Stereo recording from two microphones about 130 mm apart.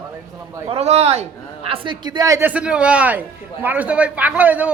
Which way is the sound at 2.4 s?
10° right (ahead or behind).